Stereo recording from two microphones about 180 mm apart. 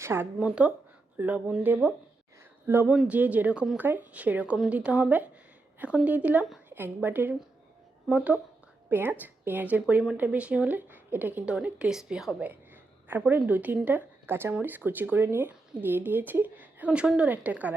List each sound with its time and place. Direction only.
0.0 s a woman's voice: 15° right (ahead or behind)